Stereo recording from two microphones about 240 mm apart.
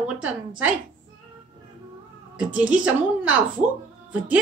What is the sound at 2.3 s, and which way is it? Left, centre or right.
A woman's voice, centre.